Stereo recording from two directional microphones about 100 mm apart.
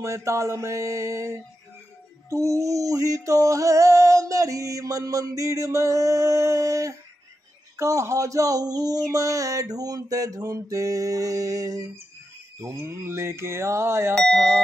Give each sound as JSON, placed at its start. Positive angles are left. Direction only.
{"t": 0.0, "sound": "a sound", "side_deg": -30}
{"t": 12.6, "sound": "speech", "side_deg": -25}
{"t": 14.1, "sound": "speech", "side_deg": 5}